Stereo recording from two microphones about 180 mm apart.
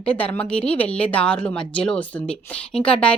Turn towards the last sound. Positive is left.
turn(degrees=5)  # may be behind; listen again after turning